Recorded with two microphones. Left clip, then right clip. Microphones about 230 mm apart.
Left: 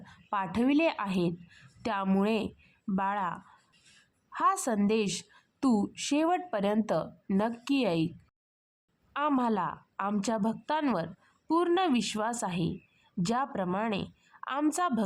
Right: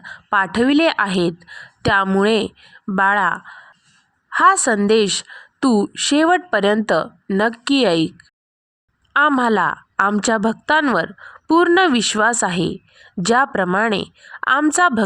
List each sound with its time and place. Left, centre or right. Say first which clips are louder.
0.0 s a woman's voice: right 15 dB; right
9.1 s a woman's voice: right 14 dB; right